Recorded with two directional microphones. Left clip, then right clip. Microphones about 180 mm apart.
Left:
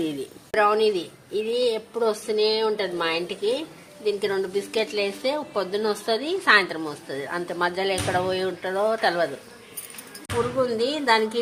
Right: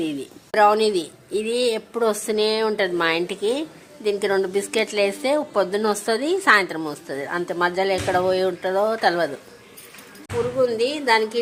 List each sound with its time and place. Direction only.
0.5 s a woman's voice: 35° right (ahead or behind)
10.6 s a woman's voice: centre (ahead or behind)